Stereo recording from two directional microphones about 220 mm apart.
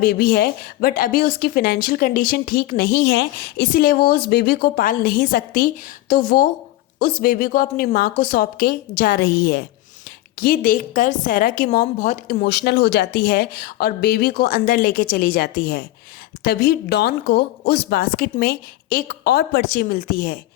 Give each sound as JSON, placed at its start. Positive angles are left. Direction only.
{"t": 0.0, "sound": "a woman's voice", "side_deg": 40}